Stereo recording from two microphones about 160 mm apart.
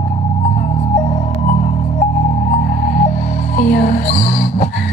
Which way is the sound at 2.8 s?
50° left (ahead or behind).